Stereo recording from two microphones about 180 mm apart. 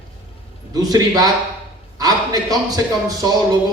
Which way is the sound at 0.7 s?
20° right (ahead or behind).